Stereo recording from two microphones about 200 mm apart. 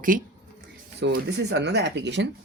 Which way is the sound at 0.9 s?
60° right (ahead or behind).